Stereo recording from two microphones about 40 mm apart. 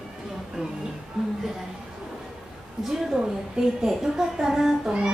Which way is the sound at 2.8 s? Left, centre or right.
Centre.